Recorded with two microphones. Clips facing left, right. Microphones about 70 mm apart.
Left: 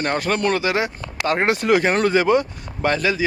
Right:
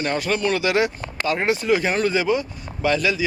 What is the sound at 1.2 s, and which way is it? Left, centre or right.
Speech, left.